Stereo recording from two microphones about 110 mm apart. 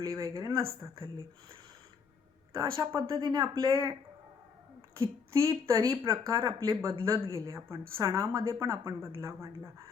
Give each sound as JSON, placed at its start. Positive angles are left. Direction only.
{"t": 0.0, "sound": "a woman's voice", "side_deg": -30}
{"t": 2.5, "sound": "a woman's voice", "side_deg": -30}
{"t": 3.2, "sound": "speech", "side_deg": -45}
{"t": 4.9, "sound": "a woman's voice", "side_deg": -30}